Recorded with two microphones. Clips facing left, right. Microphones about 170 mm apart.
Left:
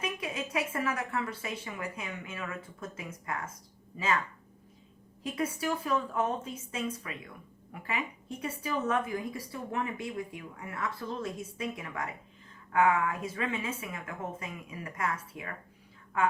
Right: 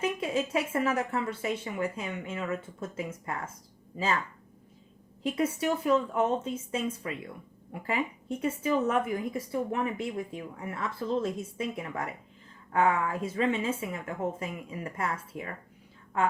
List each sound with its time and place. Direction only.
0.0 s a woman's voice: 25° right (ahead or behind)
5.2 s a woman's voice: 25° right (ahead or behind)